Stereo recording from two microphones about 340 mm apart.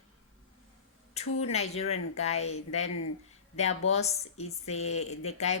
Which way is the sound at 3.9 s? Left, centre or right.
Centre.